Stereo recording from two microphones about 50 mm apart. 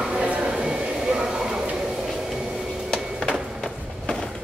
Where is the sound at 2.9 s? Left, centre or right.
Centre.